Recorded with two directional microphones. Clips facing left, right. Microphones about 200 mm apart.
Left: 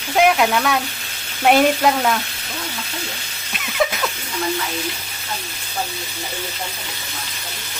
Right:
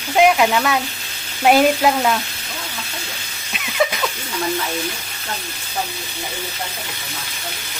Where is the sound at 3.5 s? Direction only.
Centre (ahead or behind).